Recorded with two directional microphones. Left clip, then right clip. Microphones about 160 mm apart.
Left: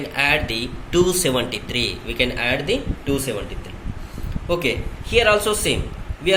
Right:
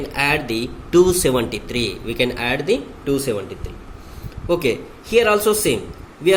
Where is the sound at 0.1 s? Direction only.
55° right (ahead or behind).